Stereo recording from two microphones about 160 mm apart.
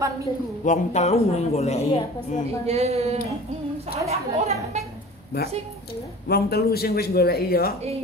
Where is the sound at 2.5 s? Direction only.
40° right (ahead or behind).